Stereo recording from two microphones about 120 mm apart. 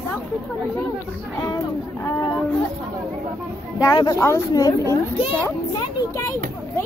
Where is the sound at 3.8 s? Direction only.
30° left (ahead or behind).